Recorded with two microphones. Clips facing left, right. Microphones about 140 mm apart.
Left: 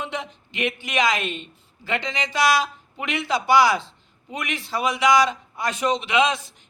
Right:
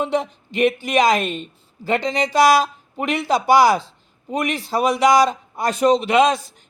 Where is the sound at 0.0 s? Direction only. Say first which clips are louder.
Right 9 dB; 40° right (ahead or behind).